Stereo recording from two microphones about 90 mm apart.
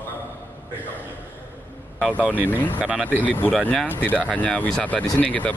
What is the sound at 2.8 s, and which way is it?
Speech, 10° right (ahead or behind).